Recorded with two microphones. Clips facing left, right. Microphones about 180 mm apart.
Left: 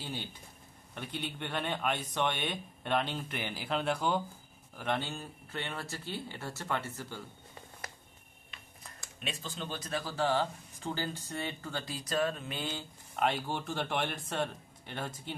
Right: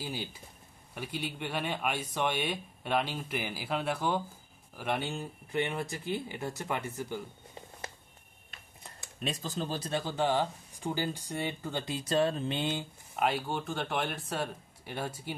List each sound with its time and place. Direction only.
0.0 s speech: 10° right (ahead or behind)
9.2 s speech: 40° right (ahead or behind)
13.1 s speech: 5° right (ahead or behind)